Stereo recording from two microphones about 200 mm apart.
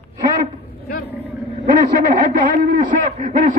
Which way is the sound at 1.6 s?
40° right (ahead or behind).